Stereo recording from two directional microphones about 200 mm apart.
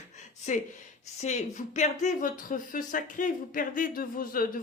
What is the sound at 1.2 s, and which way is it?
Speech, 35° left (ahead or behind).